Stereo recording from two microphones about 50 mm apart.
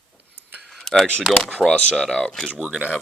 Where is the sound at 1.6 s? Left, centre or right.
Centre.